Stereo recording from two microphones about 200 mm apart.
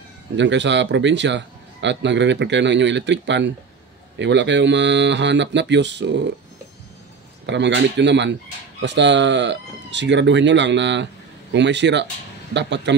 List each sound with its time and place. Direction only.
0.4 s a man's voice: 65° right (ahead or behind)
7.4 s a man's voice: 60° right (ahead or behind)